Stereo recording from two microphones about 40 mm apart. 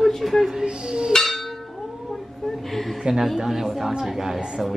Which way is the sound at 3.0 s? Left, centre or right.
Centre.